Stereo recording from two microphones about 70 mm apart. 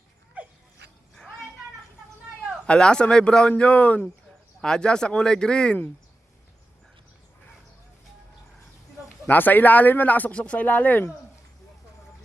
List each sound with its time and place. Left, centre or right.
0.4 s a sound: centre
2.6 s speech: centre
4.6 s speech: centre
9.2 s speech: left